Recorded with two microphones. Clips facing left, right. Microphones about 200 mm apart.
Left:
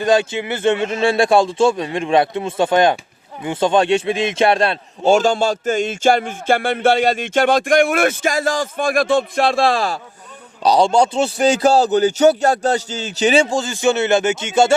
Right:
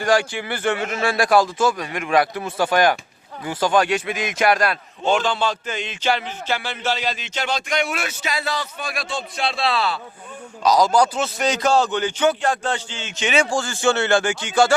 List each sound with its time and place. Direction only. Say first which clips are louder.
0.0 s a man's voice: left 4 dB; 20° left (ahead or behind)
5.0 s music: left 6 dB; 45° left (ahead or behind)
10.6 s a man's voice: left 3 dB; 30° left (ahead or behind)
13.4 s a man's voice: left 3 dB; 20° left (ahead or behind)